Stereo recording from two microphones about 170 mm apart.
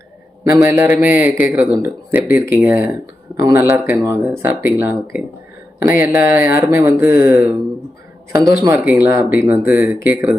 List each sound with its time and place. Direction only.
0.4 s speech: 15° right (ahead or behind)